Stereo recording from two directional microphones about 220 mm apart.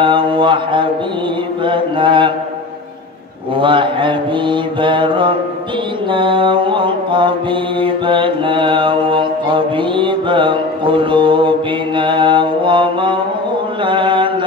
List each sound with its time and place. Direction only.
0.0 s mantra: 20° right (ahead or behind)
3.5 s mantra: 20° right (ahead or behind)